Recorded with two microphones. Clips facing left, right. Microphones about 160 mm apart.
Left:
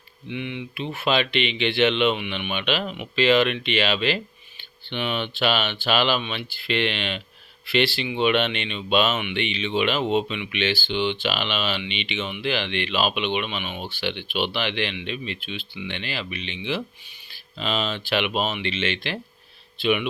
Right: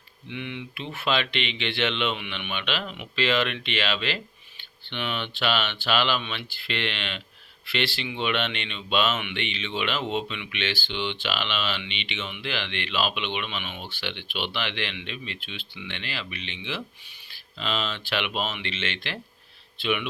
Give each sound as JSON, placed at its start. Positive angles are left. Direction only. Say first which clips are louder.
{"t": 0.3, "sound": "speech", "louder": "left 4 dB", "side_deg": 5}
{"t": 0.9, "sound": "speech", "louder": "left 4 dB", "side_deg": 15}